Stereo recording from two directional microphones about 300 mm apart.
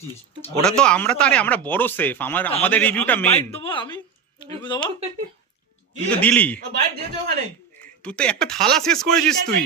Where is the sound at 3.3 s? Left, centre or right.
Centre.